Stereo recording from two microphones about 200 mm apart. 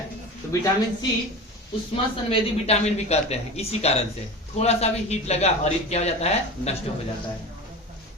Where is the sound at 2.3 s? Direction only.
30° left (ahead or behind).